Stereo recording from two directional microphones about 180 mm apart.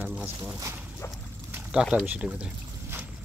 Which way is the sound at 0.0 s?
10° right (ahead or behind).